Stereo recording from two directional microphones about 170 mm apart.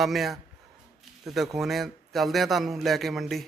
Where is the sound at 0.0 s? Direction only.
Centre (ahead or behind).